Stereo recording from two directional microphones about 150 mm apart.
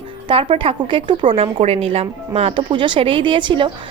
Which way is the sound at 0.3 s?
35° right (ahead or behind).